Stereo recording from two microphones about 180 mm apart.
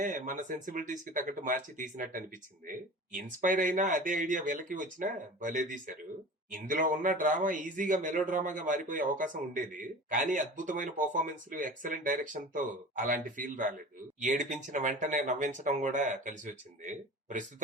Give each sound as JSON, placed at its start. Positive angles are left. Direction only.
{"t": 0.0, "sound": "speech", "side_deg": -45}